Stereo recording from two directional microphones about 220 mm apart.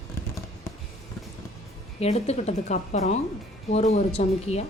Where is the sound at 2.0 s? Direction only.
30° left (ahead or behind).